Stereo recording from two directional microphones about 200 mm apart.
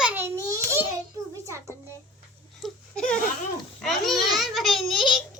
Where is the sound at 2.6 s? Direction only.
5° left (ahead or behind).